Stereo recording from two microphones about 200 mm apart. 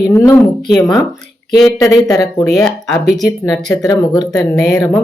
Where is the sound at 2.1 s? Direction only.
20° left (ahead or behind).